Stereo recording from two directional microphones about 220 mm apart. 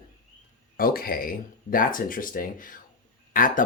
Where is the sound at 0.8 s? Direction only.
40° left (ahead or behind).